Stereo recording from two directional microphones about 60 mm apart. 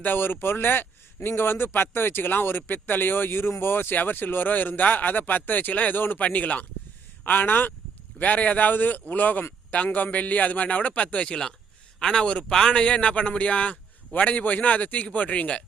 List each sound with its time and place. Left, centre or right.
0.0 s a man's voice: left